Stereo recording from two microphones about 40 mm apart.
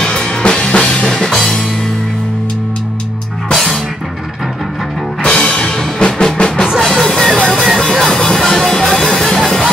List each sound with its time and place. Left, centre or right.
0.0 s drum kit: left
1.1 s music: centre
5.2 s music: left
6.8 s music: centre
8.0 s music: centre